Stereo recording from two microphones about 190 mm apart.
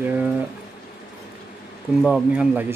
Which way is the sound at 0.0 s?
10° right (ahead or behind).